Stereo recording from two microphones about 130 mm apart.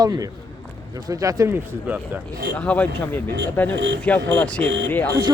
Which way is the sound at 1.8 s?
10° right (ahead or behind).